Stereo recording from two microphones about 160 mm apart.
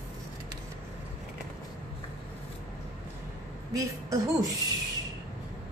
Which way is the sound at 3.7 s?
20° right (ahead or behind).